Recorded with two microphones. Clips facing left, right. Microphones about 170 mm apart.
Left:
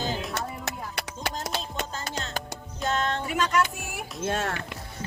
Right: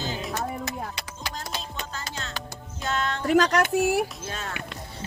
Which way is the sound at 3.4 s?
70° right (ahead or behind).